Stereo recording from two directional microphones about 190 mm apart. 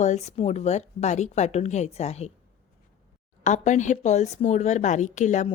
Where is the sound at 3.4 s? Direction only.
40° left (ahead or behind).